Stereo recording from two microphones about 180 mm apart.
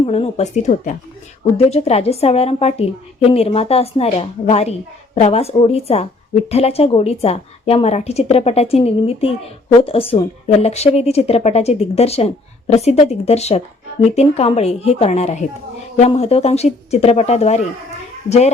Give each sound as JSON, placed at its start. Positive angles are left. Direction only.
{"t": 0.0, "sound": "a woman's voice", "side_deg": 35}